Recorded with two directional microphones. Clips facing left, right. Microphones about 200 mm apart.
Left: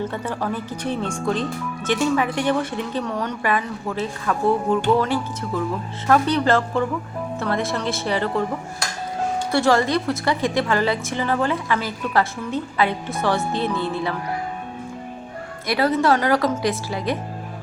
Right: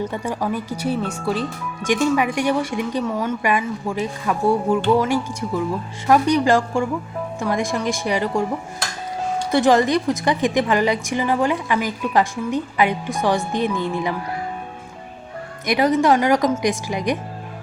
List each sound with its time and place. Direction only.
0.0 s speech: 15° right (ahead or behind)
9.5 s speech: 20° right (ahead or behind)
15.6 s speech: 15° right (ahead or behind)